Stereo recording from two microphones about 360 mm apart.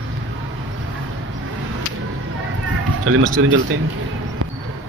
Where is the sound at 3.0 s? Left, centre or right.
Right.